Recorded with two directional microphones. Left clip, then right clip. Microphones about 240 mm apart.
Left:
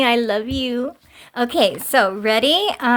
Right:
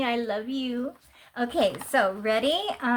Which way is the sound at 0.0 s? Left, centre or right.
Left.